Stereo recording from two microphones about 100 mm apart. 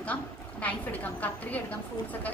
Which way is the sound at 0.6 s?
15° left (ahead or behind).